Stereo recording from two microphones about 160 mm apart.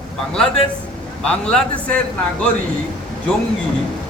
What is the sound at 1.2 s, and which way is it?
Speech, 5° left (ahead or behind).